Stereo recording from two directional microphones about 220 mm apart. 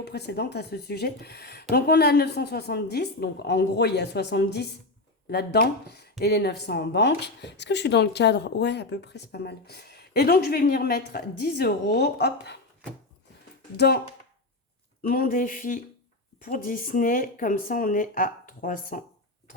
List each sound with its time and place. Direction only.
0.0 s speech: 50° left (ahead or behind)
13.7 s speech: 45° left (ahead or behind)
15.0 s speech: 40° left (ahead or behind)